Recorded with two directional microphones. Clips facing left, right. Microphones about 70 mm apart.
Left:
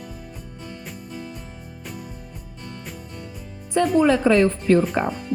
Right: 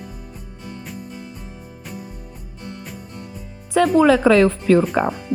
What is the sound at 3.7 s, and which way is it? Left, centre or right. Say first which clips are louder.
Speech: right 4 dB; right.